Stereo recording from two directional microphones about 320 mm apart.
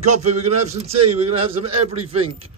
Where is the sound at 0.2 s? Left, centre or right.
Right.